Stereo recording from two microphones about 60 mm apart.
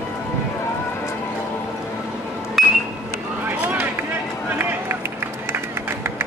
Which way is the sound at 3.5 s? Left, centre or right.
Right.